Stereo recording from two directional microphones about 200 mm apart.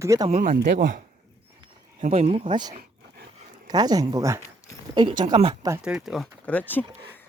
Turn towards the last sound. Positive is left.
turn(degrees=10)  # may be behind; listen again after turning